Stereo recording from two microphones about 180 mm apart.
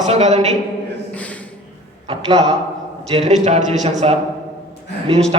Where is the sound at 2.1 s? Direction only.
30° right (ahead or behind).